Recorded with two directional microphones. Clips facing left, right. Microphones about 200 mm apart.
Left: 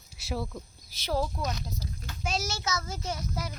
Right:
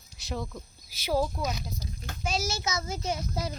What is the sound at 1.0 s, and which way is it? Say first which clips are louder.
Speech: right 2 dB; 5° right (ahead or behind).